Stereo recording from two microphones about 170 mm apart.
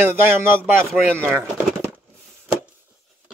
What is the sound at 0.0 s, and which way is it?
Speech, 10° right (ahead or behind).